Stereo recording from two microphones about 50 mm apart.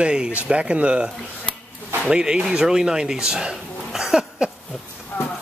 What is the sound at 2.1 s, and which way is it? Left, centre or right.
A man's voice, centre.